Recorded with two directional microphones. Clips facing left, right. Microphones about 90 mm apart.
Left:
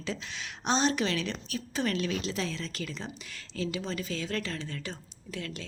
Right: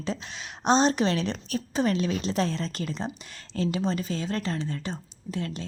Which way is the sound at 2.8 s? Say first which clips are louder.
Right 6 dB; 30° right (ahead or behind).